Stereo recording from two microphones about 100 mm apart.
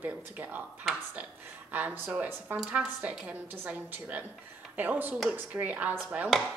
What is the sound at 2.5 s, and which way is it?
A woman's voice, 5° right (ahead or behind).